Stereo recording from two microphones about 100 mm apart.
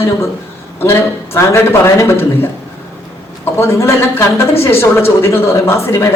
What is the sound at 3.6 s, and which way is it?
A man's voice, 30° left (ahead or behind).